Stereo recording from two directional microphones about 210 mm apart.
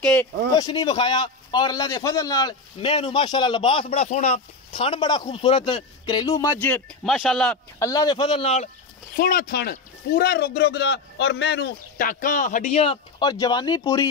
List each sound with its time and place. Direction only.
0.0 s speech: 5° left (ahead or behind)
0.6 s a man's voice: 20° left (ahead or behind); by 7.5 s centre (ahead or behind)
7.8 s a man's voice: 15° left (ahead or behind)
9.1 s speech: 45° left (ahead or behind); by 14.0 s 20° left (ahead or behind)